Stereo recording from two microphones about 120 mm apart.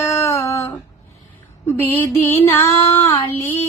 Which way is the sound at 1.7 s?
20° left (ahead or behind).